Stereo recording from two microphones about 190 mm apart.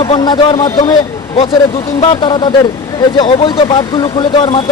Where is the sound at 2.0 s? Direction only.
25° left (ahead or behind).